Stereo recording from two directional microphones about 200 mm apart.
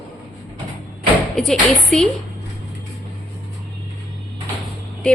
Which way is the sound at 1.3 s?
Centre (ahead or behind).